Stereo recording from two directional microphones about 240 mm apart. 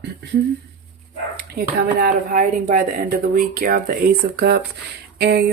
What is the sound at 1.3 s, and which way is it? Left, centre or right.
Speech, right.